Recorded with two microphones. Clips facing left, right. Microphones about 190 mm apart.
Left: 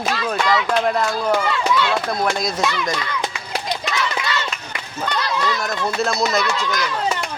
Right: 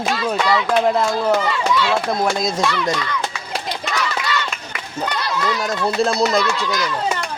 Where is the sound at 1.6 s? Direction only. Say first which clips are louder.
Right 1 dB; centre (ahead or behind).